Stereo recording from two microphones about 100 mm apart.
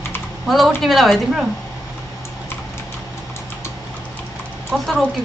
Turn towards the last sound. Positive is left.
turn(degrees=0)  # may be behind; listen again after turning